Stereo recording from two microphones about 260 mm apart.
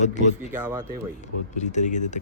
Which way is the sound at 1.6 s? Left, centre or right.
Left.